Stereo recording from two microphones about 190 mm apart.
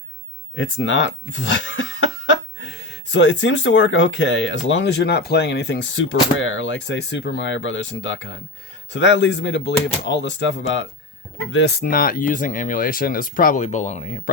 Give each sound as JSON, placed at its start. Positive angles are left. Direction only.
{"t": 0.5, "sound": "speech", "side_deg": 80}
{"t": 11.5, "sound": "speech", "side_deg": 60}